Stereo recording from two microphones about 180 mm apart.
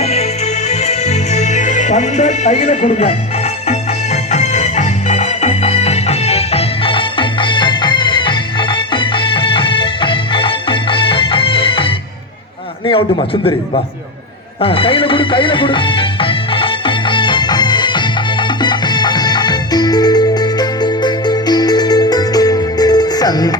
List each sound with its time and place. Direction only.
0.0 s music: 35° left (ahead or behind)
12.8 s a man's voice: 30° left (ahead or behind)
14.6 s music: 30° left (ahead or behind)